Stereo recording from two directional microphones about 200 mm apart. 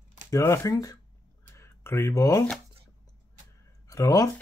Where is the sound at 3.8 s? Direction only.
15° left (ahead or behind).